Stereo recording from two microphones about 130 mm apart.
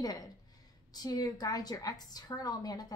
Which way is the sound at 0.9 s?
30° left (ahead or behind).